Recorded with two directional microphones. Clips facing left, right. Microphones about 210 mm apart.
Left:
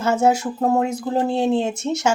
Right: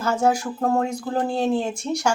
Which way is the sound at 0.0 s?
25° left (ahead or behind).